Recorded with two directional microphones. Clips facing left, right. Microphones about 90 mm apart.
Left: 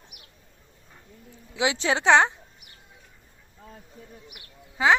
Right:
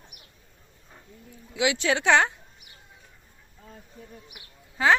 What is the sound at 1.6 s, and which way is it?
Speech, 30° left (ahead or behind).